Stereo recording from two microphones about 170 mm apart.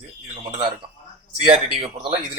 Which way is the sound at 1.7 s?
35° right (ahead or behind).